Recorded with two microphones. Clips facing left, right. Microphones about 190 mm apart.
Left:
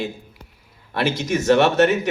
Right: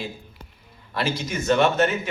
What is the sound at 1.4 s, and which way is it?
Speech, 75° left (ahead or behind).